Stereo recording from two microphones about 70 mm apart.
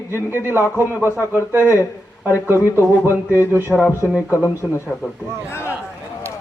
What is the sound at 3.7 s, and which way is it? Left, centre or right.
A man's voice, left.